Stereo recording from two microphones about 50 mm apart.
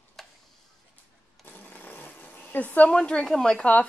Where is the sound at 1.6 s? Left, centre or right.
Left.